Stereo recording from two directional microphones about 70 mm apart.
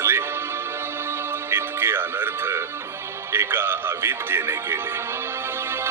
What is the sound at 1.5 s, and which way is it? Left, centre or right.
Speech, right.